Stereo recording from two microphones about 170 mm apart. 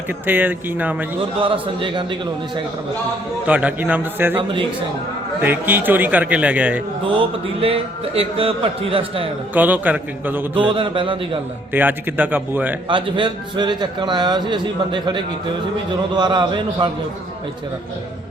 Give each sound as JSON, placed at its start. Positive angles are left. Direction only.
{"t": 0.1, "sound": "a man's voice", "side_deg": -10}
{"t": 1.4, "sound": "a man's voice", "side_deg": -30}
{"t": 3.4, "sound": "a man's voice", "side_deg": -10}
{"t": 5.4, "sound": "a man's voice", "side_deg": -10}
{"t": 7.6, "sound": "a man's voice", "side_deg": -35}
{"t": 9.6, "sound": "a man's voice", "side_deg": -10}
{"t": 10.7, "sound": "a man's voice", "side_deg": -30}
{"t": 11.7, "sound": "a man's voice", "side_deg": -10}
{"t": 12.9, "sound": "a man's voice", "side_deg": -30}